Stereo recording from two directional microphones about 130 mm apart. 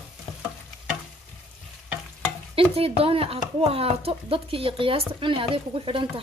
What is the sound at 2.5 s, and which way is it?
Speech, 45° right (ahead or behind).